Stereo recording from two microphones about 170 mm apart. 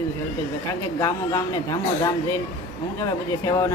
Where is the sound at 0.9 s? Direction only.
20° left (ahead or behind).